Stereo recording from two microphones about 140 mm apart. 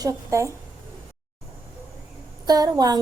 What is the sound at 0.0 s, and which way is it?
Speech, 20° right (ahead or behind).